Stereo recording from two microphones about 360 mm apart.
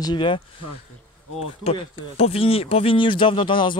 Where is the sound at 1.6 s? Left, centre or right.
Centre.